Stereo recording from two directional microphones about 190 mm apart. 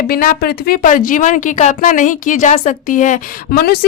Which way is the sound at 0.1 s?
50° left (ahead or behind).